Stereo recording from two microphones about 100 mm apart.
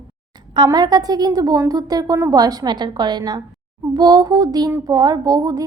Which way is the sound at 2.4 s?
40° right (ahead or behind).